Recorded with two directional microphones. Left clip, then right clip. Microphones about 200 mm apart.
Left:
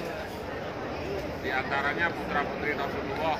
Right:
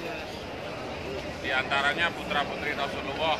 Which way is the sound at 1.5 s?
35° right (ahead or behind).